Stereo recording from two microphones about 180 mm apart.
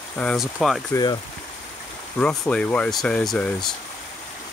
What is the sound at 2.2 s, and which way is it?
Speech, 5° left (ahead or behind).